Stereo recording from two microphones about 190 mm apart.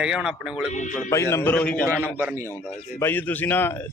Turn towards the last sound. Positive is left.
turn(degrees=10)  # may be behind; listen again after turning